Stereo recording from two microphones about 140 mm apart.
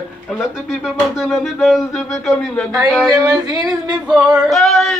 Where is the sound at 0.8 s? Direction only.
Centre (ahead or behind).